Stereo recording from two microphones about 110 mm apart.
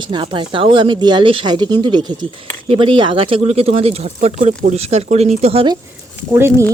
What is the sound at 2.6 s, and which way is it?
Speech, 50° right (ahead or behind).